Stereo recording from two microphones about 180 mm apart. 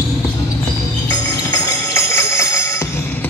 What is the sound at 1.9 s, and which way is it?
Music, 15° left (ahead or behind).